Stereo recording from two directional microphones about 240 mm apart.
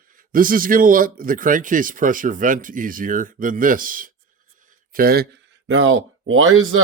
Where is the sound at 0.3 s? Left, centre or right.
Right.